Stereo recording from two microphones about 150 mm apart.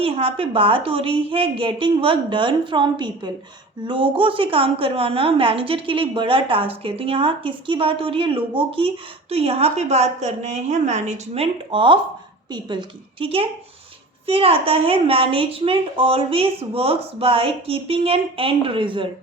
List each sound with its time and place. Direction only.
0.0 s a woman's voice: 40° right (ahead or behind)
11.7 s a woman's voice: 35° right (ahead or behind)